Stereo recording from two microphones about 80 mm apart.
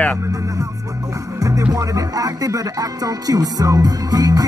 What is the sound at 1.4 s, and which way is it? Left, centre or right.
Music, right.